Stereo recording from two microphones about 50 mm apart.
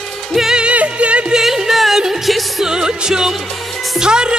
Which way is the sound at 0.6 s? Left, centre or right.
Right.